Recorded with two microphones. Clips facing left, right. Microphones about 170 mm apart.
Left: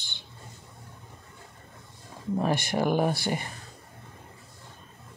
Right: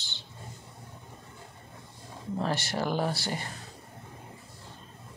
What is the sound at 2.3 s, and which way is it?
Speech, 15° left (ahead or behind).